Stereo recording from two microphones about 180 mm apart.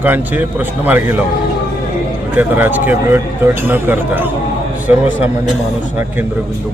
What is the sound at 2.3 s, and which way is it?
Speech, 10° right (ahead or behind).